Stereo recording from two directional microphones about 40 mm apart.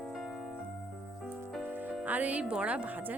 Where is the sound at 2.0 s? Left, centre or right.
Right.